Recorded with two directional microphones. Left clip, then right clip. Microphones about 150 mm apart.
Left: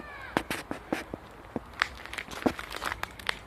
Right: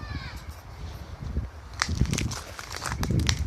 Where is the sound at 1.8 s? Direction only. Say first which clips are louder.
Right 3 dB; 55° right (ahead or behind); by 3.2 s 40° right (ahead or behind).